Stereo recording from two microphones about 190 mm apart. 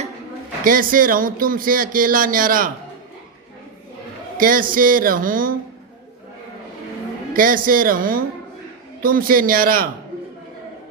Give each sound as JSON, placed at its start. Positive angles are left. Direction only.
{"t": 0.6, "sound": "speech", "side_deg": -45}
{"t": 4.4, "sound": "speech", "side_deg": -45}
{"t": 7.3, "sound": "speech", "side_deg": -45}